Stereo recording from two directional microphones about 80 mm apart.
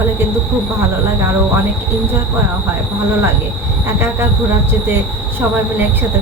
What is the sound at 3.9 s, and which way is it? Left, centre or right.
Speech, right.